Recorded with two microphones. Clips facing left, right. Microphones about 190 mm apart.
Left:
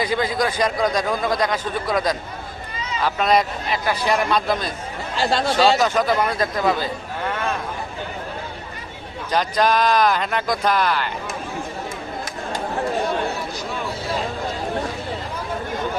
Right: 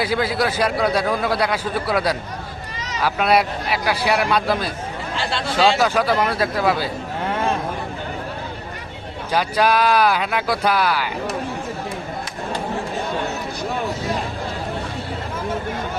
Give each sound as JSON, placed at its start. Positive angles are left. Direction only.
{"t": 0.0, "sound": "a man's voice", "side_deg": -5}
{"t": 5.1, "sound": "speech", "side_deg": 40}
{"t": 5.8, "sound": "a man's voice", "side_deg": -10}
{"t": 9.3, "sound": "a man's voice", "side_deg": -10}